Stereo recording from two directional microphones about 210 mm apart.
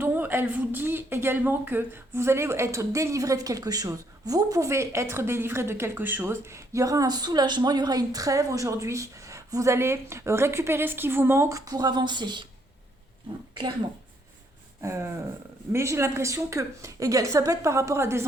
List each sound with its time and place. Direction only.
0.0 s speech: 10° right (ahead or behind)
13.5 s speech: 20° right (ahead or behind)
14.8 s speech: 15° right (ahead or behind)